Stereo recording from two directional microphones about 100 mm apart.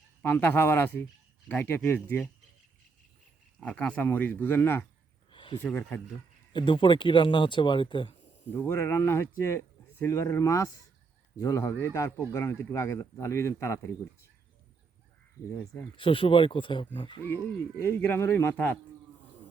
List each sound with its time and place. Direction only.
0.2 s speech: 20° left (ahead or behind)
3.6 s speech: 10° left (ahead or behind)
5.3 s a sound: 55° left (ahead or behind)
6.5 s speech: 50° left (ahead or behind)
8.5 s speech: 25° left (ahead or behind)
16.0 s speech: 60° left (ahead or behind)
17.7 s speech: 25° left (ahead or behind)